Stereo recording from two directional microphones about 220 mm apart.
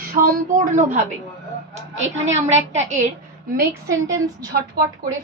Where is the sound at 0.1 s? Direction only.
40° right (ahead or behind).